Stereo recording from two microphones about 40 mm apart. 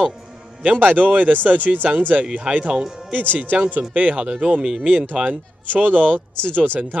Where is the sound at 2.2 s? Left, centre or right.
Right.